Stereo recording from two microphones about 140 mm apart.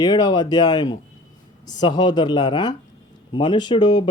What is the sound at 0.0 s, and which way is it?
Speech, 30° left (ahead or behind).